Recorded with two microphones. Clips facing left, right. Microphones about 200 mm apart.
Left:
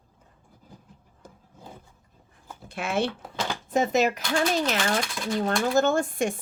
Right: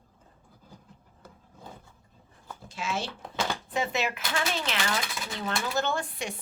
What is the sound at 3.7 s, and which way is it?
Speech, 45° left (ahead or behind).